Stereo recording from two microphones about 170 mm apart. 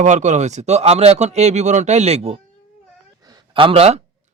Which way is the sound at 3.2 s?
20° right (ahead or behind).